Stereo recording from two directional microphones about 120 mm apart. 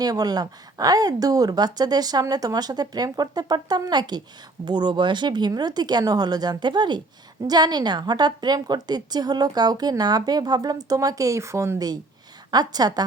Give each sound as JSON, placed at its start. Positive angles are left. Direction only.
{"t": 0.0, "sound": "a woman's voice", "side_deg": -35}
{"t": 12.5, "sound": "a woman's voice", "side_deg": -35}